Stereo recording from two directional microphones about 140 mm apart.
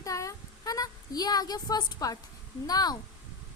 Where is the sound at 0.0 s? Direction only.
25° left (ahead or behind).